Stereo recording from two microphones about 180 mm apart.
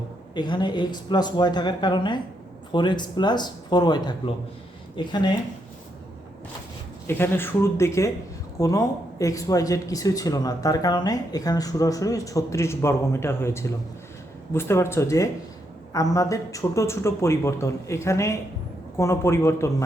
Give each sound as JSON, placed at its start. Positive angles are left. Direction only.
{"t": 0.3, "sound": "speech", "side_deg": 25}
{"t": 7.1, "sound": "speech", "side_deg": 10}